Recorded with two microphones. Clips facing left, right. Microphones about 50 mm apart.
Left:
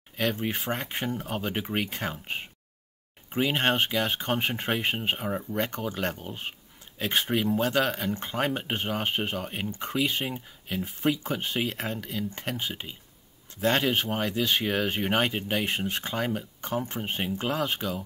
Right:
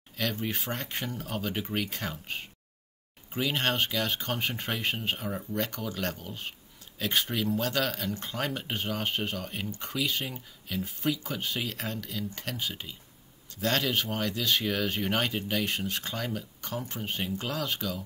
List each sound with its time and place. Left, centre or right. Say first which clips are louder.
0.1 s speech: left 4 dB; centre